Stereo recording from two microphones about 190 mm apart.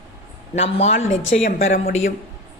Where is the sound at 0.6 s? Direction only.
35° left (ahead or behind).